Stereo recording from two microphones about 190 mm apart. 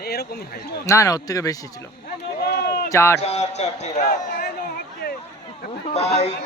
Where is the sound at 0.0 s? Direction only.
55° left (ahead or behind).